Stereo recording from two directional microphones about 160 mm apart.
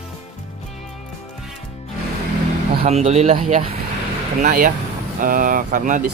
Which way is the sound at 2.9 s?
45° right (ahead or behind).